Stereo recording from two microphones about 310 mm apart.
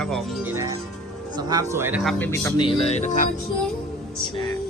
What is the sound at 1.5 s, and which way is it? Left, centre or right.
Speech, centre.